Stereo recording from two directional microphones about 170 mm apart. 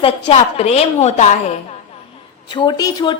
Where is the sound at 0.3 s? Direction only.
35° left (ahead or behind).